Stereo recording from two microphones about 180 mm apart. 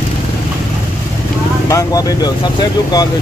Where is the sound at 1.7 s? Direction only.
20° left (ahead or behind).